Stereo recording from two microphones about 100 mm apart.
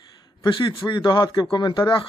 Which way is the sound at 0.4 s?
50° left (ahead or behind).